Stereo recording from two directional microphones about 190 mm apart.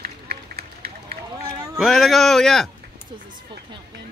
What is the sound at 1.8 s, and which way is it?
Speech, centre (ahead or behind).